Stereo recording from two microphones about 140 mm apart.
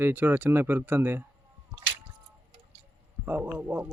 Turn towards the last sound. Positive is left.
turn(degrees=-10)  # may be behind; listen again after turning